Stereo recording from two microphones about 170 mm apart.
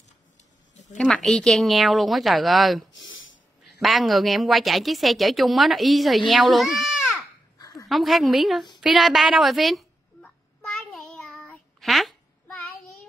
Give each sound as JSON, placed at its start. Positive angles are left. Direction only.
{"t": 0.9, "sound": "a woman's voice", "side_deg": 5}
{"t": 3.0, "sound": "a sound", "side_deg": 90}
{"t": 3.8, "sound": "a woman's voice", "side_deg": 0}
{"t": 7.5, "sound": "dog", "side_deg": 20}
{"t": 7.9, "sound": "a woman's voice", "side_deg": 0}
{"t": 8.8, "sound": "a sound", "side_deg": 0}